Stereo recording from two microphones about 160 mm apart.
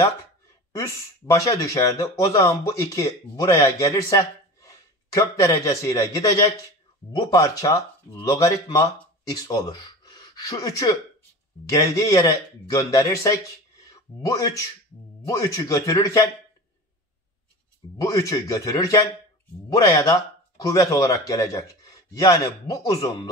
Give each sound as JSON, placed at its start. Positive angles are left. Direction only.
{"t": 0.7, "sound": "a man's voice", "side_deg": 20}
{"t": 13.8, "sound": "a sound", "side_deg": 20}
{"t": 15.2, "sound": "speech", "side_deg": 20}
{"t": 18.0, "sound": "speech", "side_deg": 20}